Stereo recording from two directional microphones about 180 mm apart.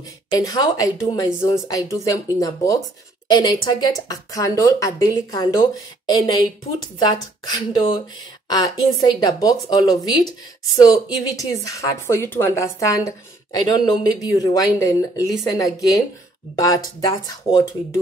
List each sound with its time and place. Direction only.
0.3 s speech: 20° left (ahead or behind)
7.0 s speech: 20° left (ahead or behind)